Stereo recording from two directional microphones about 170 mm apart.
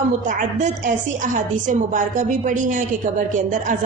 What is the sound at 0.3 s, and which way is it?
A woman's voice, 50° right (ahead or behind).